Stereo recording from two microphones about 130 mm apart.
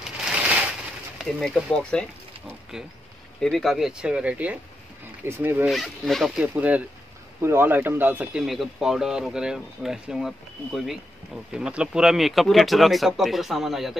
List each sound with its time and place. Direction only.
0.0 s crushing: 5° right (ahead or behind)
1.1 s speech: 5° left (ahead or behind)
3.3 s speech: 5° left (ahead or behind); by 5.7 s 15° right (ahead or behind)
5.7 s speech: centre (ahead or behind)